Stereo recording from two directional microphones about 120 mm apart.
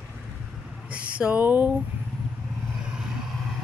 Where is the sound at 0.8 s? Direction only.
10° right (ahead or behind).